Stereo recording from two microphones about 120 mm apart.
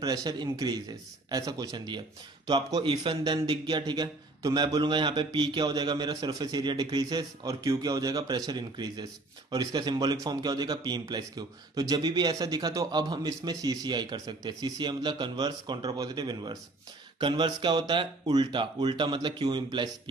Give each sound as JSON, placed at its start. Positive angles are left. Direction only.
{"t": 0.0, "sound": "a man's voice", "side_deg": -30}